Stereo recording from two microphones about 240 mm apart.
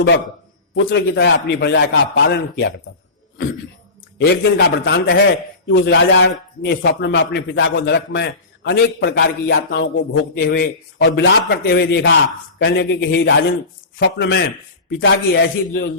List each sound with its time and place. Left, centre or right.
0.7 s a man's voice: left
4.2 s a man's voice: left